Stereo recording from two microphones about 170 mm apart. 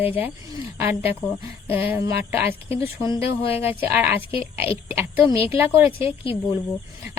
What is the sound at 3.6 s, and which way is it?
Speech, 10° right (ahead or behind).